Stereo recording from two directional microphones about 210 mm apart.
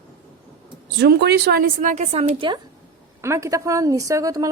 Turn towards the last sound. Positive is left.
turn(degrees=-15)  # may be behind; listen again after turning